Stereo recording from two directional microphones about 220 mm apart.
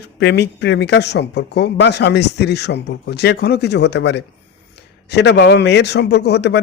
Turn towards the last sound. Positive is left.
turn(degrees=50)  # may be behind; listen again after turning